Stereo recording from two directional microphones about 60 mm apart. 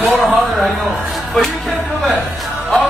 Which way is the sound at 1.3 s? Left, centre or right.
Centre.